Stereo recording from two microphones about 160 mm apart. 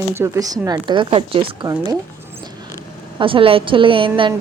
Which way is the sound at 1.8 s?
25° right (ahead or behind).